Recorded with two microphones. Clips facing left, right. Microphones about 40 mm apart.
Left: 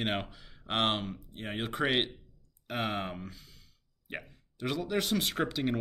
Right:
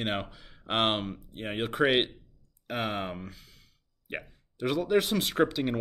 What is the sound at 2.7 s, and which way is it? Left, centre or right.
Speech, centre.